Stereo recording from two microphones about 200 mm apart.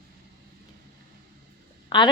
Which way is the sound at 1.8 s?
20° left (ahead or behind).